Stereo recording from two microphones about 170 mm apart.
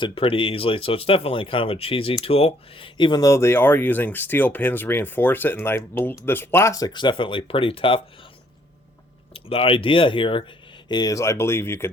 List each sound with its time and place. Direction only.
0.0 s speech: 30° left (ahead or behind)
9.3 s speech: 35° left (ahead or behind); by 11.9 s 15° left (ahead or behind)